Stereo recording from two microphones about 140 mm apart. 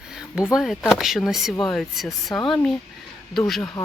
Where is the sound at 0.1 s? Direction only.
5° right (ahead or behind).